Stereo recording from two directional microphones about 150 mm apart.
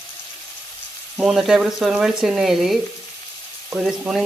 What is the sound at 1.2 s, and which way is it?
Speech, 5° right (ahead or behind).